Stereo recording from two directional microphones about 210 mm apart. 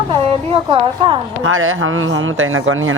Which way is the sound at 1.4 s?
70° right (ahead or behind).